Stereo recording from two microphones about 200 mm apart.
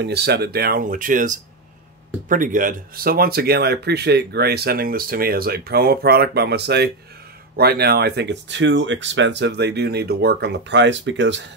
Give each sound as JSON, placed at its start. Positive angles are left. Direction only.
{"t": 0.0, "sound": "speech", "side_deg": -55}